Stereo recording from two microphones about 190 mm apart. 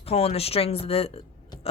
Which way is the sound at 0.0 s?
35° left (ahead or behind).